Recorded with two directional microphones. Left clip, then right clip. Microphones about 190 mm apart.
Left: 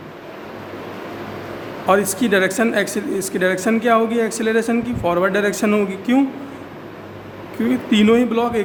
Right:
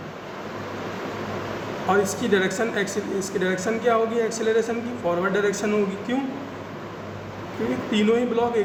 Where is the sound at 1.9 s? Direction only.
60° left (ahead or behind).